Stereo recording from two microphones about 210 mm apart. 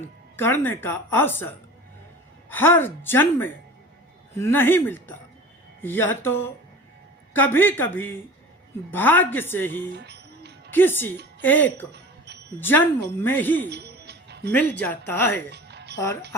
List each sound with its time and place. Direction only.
0.3 s speech: 10° left (ahead or behind)
2.5 s speech: 10° left (ahead or behind)
9.9 s music: 55° right (ahead or behind)
10.7 s speech: 10° left (ahead or behind)
11.9 s music: 50° right (ahead or behind)
12.5 s speech: 10° left (ahead or behind)
13.7 s music: 50° right (ahead or behind)
14.5 s speech: 10° left (ahead or behind)
15.4 s music: 50° right (ahead or behind)